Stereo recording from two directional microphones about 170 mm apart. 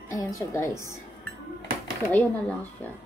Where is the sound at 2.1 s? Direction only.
10° left (ahead or behind).